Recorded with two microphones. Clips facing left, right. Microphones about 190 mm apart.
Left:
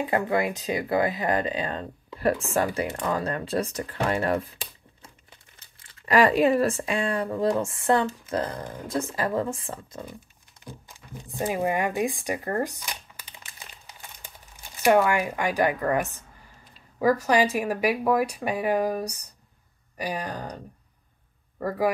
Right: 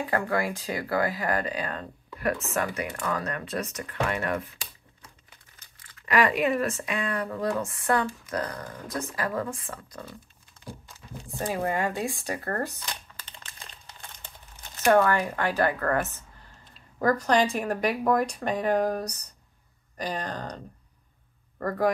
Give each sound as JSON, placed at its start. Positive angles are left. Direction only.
{"t": 0.0, "sound": "speech", "side_deg": 20}
{"t": 5.9, "sound": "speech", "side_deg": 30}